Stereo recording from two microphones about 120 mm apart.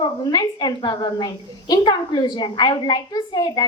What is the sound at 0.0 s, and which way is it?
A woman's voice, 35° left (ahead or behind).